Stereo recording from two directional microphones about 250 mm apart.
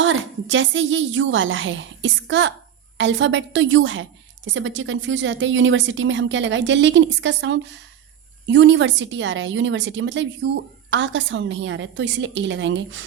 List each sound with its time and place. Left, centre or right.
0.0 s a woman's voice: right